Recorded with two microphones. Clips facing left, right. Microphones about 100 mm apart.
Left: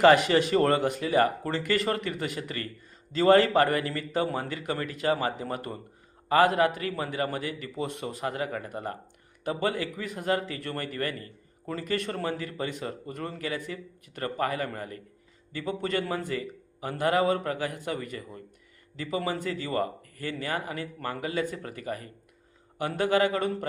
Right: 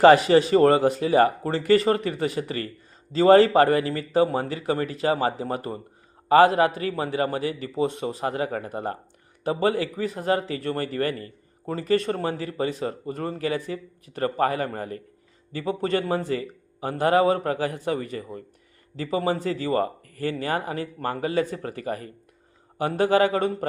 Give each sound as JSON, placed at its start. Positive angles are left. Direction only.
{"t": 0.0, "sound": "a man's voice", "side_deg": -30}